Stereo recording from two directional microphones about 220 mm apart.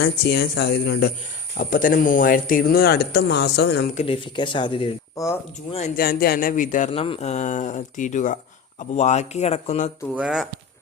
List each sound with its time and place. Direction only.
0.0 s speech: 50° left (ahead or behind)
3.9 s speech: 25° left (ahead or behind)
5.7 s speech: 35° left (ahead or behind)
10.2 s speech: 5° right (ahead or behind)